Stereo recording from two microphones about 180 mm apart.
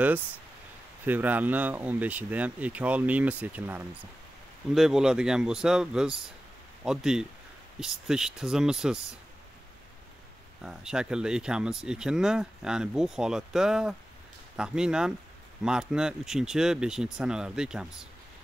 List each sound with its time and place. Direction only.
1.0 s speech: 10° right (ahead or behind)
10.6 s speech: 5° right (ahead or behind)